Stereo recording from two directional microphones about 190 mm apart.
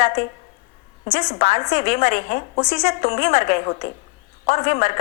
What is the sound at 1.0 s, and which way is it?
A woman's voice, 30° left (ahead or behind).